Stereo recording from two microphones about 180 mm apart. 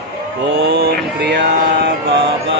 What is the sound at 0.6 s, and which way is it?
Speech, 65° right (ahead or behind).